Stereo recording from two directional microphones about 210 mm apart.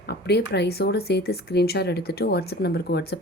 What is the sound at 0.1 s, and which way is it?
Speech, 50° left (ahead or behind).